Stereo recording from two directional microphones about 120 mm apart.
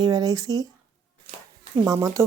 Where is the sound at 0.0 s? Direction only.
35° right (ahead or behind).